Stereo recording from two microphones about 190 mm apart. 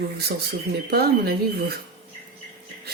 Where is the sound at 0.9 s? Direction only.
55° right (ahead or behind).